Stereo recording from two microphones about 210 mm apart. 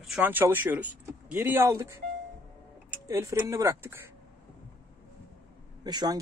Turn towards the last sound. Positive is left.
turn(degrees=-20)  # may be behind; listen again after turning